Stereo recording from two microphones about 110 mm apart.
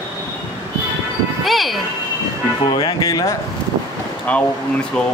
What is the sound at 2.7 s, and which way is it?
Speech, 35° left (ahead or behind).